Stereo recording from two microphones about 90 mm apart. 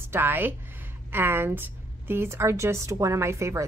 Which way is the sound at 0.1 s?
20° right (ahead or behind).